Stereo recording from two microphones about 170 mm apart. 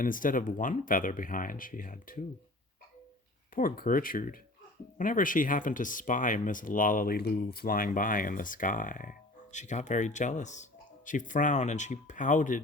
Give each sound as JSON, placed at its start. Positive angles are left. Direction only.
{"t": 0.0, "sound": "speech", "side_deg": 55}
{"t": 3.5, "sound": "speech", "side_deg": 55}